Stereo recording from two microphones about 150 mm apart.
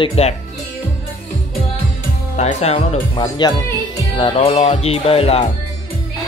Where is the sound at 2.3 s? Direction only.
45° left (ahead or behind).